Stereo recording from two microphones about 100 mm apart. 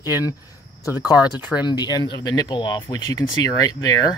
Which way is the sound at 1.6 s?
45° left (ahead or behind).